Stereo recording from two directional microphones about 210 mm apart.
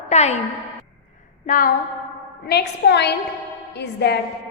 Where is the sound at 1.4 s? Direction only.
40° left (ahead or behind).